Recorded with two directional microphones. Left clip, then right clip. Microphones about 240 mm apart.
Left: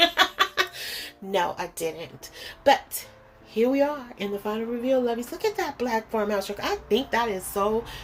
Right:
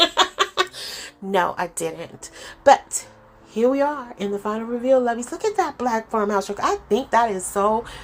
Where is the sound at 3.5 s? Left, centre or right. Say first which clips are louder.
Right 3 dB; centre.